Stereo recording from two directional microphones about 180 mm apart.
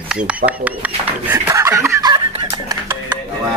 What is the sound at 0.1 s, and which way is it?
Speech, 5° right (ahead or behind).